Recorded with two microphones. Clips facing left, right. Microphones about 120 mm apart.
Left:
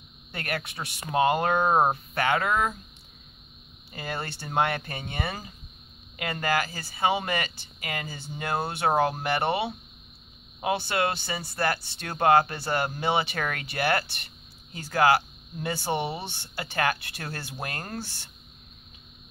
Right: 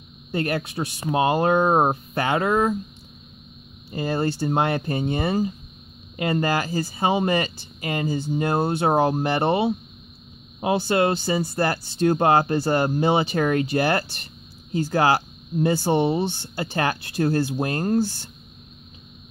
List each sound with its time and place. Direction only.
0.4 s speech: 30° right (ahead or behind)
3.9 s speech: 30° right (ahead or behind)